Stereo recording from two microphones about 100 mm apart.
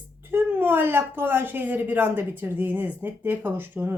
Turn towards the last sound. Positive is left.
turn(degrees=-20)  # may be behind; listen again after turning